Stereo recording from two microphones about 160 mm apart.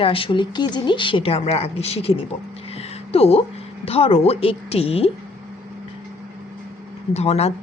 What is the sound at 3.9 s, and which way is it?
A woman's voice, 35° left (ahead or behind).